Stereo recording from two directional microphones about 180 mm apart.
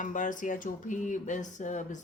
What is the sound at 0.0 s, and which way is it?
A woman's voice, 45° left (ahead or behind).